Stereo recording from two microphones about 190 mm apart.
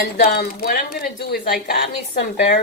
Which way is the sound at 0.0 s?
50° left (ahead or behind).